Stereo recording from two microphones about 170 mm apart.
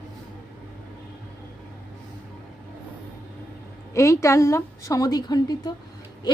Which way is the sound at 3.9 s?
20° left (ahead or behind).